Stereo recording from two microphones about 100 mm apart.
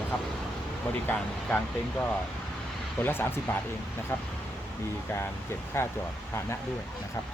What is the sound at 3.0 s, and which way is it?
Speech, 20° left (ahead or behind).